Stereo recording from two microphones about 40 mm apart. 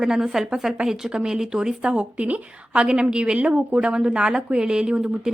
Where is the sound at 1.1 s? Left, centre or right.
Right.